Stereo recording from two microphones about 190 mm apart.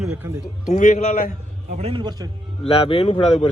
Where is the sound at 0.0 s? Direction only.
5° right (ahead or behind).